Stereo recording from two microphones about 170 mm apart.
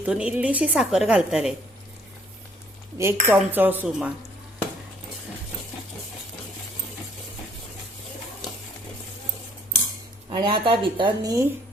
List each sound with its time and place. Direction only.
0.0 s a woman's voice: 5° right (ahead or behind)
3.0 s a woman's voice: 15° right (ahead or behind)
10.2 s speech: 30° right (ahead or behind)